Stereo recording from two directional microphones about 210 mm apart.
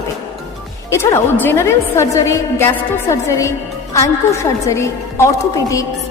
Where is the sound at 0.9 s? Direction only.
10° left (ahead or behind).